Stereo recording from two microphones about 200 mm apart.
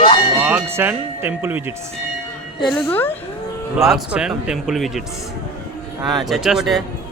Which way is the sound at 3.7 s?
Centre (ahead or behind).